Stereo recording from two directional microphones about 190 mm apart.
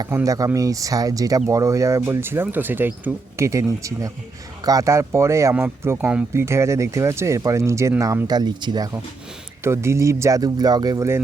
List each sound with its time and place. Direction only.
0.0 s speech: 15° right (ahead or behind)